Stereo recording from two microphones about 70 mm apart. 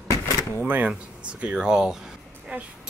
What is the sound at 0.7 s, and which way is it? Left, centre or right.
Speech, right.